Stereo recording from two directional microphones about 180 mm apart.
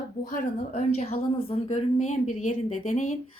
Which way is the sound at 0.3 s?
40° left (ahead or behind).